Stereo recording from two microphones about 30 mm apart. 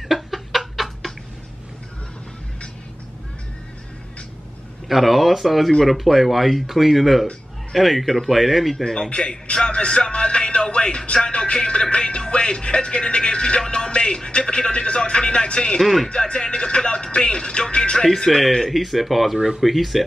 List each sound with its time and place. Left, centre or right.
0.1 s chicken: centre
4.8 s speech: centre
8.8 s speech: centre
9.1 s speech: left
9.7 s music: left
12.3 s speech: left
15.8 s speech: centre
16.3 s speech: left
18.0 s speech: centre
18.7 s speech: centre
19.3 s speech: centre
19.6 s speech: centre